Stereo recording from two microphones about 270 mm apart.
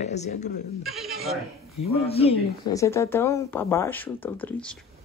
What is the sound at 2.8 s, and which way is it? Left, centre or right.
Speech, centre.